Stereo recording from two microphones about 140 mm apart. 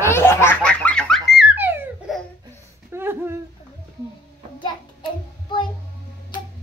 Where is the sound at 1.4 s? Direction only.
10° right (ahead or behind).